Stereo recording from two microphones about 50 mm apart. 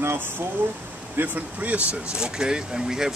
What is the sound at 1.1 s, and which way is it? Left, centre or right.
Speech, right.